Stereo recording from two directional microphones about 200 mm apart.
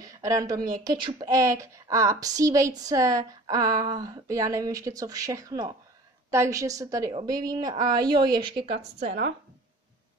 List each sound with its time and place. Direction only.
0.0 s a woman's voice: 15° right (ahead or behind)
9.0 s speech: 55° right (ahead or behind)